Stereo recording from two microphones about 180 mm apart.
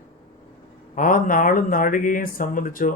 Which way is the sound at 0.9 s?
50° left (ahead or behind).